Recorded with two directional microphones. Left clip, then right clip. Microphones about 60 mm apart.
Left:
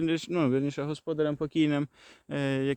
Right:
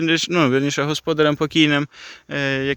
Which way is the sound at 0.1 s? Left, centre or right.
Centre.